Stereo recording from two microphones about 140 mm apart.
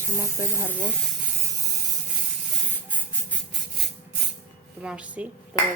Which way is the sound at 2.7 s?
15° left (ahead or behind).